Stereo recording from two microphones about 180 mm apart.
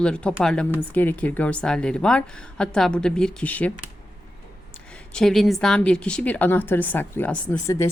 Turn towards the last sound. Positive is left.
turn(degrees=15)  # may be behind; listen again after turning